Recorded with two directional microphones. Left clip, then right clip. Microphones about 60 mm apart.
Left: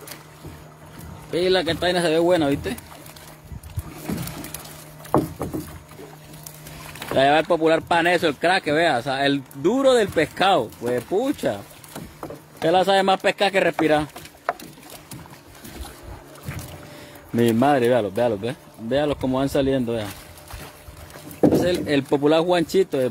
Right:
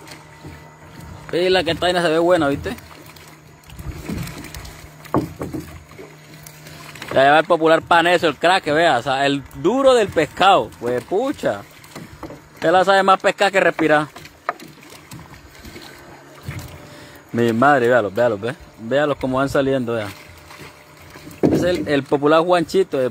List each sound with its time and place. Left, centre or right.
1.3 s speech: centre
5.1 s rowboat: right
7.0 s speech: centre
12.6 s speech: centre
17.4 s speech: centre
21.5 s speech: centre